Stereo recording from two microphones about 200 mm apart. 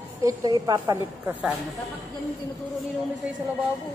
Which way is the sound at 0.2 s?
15° right (ahead or behind).